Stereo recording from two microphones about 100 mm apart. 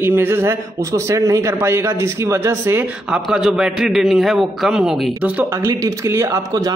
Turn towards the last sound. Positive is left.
turn(degrees=-40)  # may be behind; listen again after turning